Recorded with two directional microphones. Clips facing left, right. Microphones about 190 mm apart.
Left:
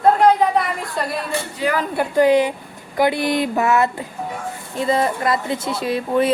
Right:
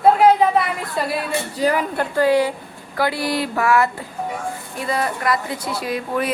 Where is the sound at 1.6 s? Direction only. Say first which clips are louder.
Right 3 dB; 40° right (ahead or behind).